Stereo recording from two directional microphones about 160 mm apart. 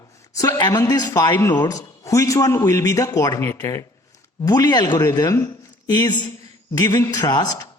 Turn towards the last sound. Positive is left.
turn(degrees=25)  # may be behind; listen again after turning